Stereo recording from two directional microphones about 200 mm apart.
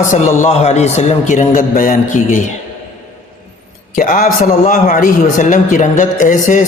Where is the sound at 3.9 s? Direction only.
40° left (ahead or behind).